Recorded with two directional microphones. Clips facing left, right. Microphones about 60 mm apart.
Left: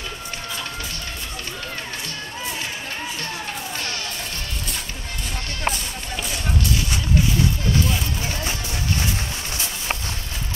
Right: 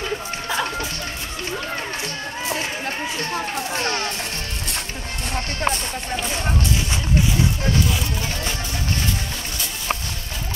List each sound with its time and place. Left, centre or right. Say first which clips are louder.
3.2 s a sound: right 5 dB; right
3.7 s music: right 6 dB; right
5.3 s music: right 3 dB; right
6.2 s music: even; right